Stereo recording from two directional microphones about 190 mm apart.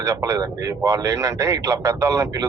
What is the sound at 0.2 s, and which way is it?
A man's voice, 15° right (ahead or behind).